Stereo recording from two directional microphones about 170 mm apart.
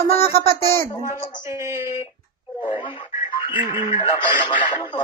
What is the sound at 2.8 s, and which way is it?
Music, 30° left (ahead or behind).